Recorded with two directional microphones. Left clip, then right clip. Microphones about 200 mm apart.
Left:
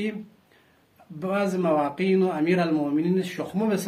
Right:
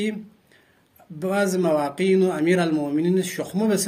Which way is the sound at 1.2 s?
45° right (ahead or behind).